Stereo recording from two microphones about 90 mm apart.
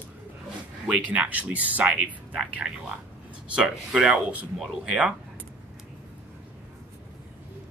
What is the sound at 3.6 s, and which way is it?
Speech, 10° right (ahead or behind).